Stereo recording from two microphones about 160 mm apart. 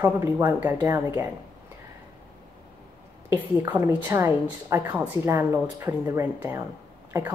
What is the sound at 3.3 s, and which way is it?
A woman's voice, 15° right (ahead or behind).